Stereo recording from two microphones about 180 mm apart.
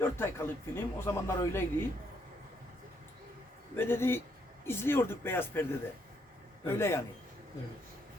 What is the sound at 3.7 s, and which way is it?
A woman's voice, 10° left (ahead or behind).